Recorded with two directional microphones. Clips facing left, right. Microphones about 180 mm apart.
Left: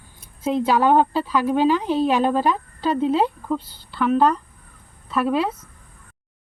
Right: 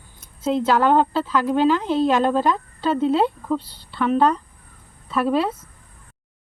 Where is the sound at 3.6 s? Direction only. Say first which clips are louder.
Right 1 dB; 30° right (ahead or behind).